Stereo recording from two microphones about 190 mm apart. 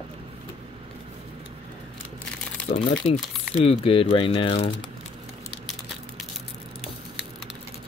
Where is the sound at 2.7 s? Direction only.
45° left (ahead or behind).